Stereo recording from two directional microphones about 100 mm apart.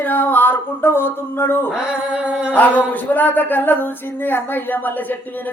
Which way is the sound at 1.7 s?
10° right (ahead or behind).